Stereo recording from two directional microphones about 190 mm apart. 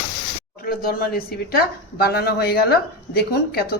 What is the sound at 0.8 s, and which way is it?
A woman's voice, 50° left (ahead or behind).